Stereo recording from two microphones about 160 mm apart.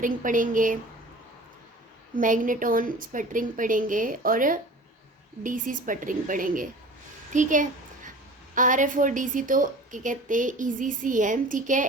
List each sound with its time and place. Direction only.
0.0 s a woman's voice: 55° right (ahead or behind)
2.1 s a woman's voice: 55° right (ahead or behind)
7.3 s a sound: 55° right (ahead or behind)
8.5 s a woman's voice: 55° right (ahead or behind)